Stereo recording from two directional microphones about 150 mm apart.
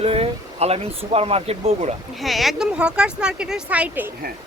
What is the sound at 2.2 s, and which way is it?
Speech, centre (ahead or behind).